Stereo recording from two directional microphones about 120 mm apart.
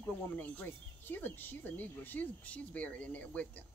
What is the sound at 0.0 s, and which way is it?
Speech, 15° left (ahead or behind).